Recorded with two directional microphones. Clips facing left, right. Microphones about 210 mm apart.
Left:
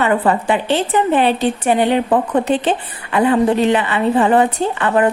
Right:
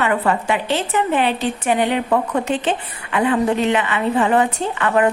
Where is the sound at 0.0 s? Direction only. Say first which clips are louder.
Left 3 dB; 35° left (ahead or behind).